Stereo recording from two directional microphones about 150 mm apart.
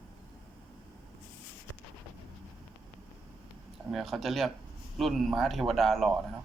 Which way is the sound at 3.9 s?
Centre (ahead or behind).